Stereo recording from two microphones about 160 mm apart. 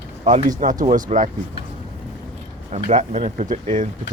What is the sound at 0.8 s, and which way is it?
Speech, 50° right (ahead or behind).